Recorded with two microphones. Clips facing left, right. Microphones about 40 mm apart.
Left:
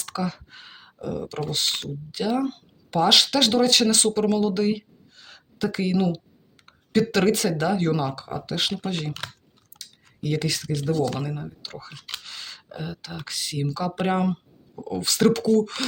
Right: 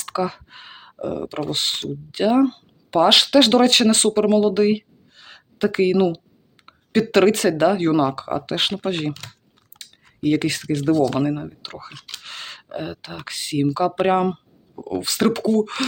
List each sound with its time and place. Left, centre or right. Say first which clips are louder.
0.0 s speech: right 5 dB; right
3.5 s speech: right 5 dB; right
9.7 s scissors: right 2 dB; right
11.1 s speech: right 9 dB; right
12.2 s a sound: right 4 dB; right
13.2 s speech: right 8 dB; right